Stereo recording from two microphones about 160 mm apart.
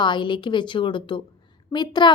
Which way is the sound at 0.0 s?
30° left (ahead or behind).